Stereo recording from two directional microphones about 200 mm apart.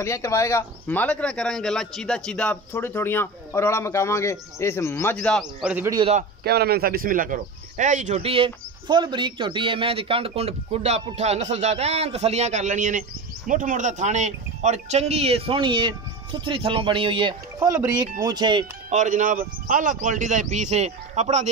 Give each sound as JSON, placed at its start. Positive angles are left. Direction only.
{"t": 0.0, "sound": "speech", "side_deg": 15}
{"t": 5.9, "sound": "speech", "side_deg": -25}
{"t": 6.4, "sound": "speech", "side_deg": -50}
{"t": 18.9, "sound": "speech", "side_deg": -35}